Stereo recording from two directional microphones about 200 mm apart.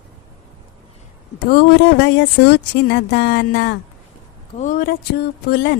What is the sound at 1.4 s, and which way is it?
Speech, 50° left (ahead or behind).